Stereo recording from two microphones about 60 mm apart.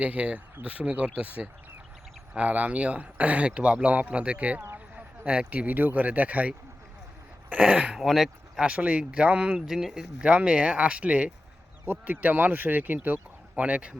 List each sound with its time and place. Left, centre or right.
0.0 s speech: right
7.7 s speech: centre
8.0 s speech: centre
8.6 s speech: centre
9.6 s speech: centre
10.2 s speech: centre